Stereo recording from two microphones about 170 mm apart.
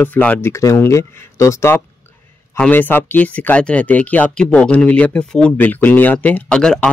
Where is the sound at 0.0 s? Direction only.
10° left (ahead or behind).